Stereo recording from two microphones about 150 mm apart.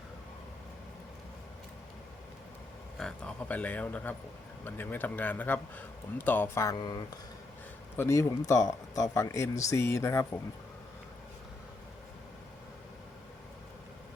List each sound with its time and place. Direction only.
3.0 s speech: 5° left (ahead or behind)